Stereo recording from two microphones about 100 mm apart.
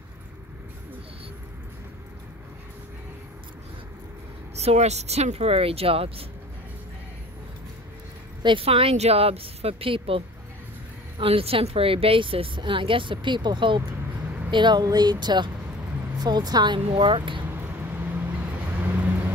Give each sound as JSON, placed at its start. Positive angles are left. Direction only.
{"t": 4.6, "sound": "speech", "side_deg": -90}
{"t": 8.4, "sound": "speech", "side_deg": -55}
{"t": 8.6, "sound": "a woman's voice", "side_deg": -80}
{"t": 17.0, "sound": "speech", "side_deg": -55}
{"t": 17.5, "sound": "vehicle", "side_deg": -20}